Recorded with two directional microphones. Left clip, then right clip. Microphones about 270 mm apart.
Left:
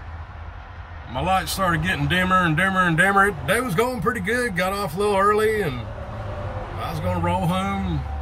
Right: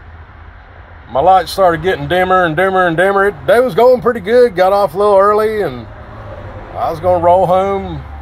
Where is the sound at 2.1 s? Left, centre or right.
Left.